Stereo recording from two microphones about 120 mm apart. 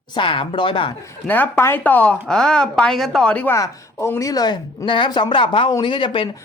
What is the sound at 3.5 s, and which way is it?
Speech, 25° left (ahead or behind).